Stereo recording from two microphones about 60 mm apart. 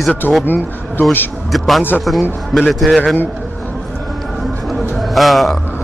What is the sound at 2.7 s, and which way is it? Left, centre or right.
Speech, centre.